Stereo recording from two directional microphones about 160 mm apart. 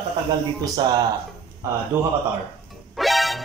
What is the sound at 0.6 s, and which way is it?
Speech, 25° right (ahead or behind).